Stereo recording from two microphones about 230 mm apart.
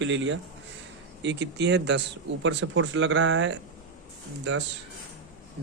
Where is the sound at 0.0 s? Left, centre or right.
Right.